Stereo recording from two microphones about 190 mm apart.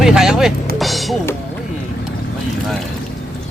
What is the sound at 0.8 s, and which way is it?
Music, centre (ahead or behind).